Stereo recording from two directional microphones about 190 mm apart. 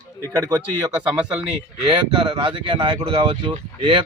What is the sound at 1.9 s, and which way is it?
Speech, 25° right (ahead or behind).